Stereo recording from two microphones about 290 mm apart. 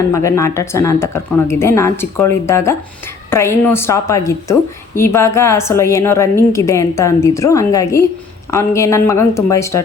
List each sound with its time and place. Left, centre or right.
0.1 s a woman's voice: centre